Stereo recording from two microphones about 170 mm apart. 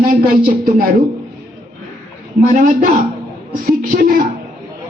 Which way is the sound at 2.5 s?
50° right (ahead or behind).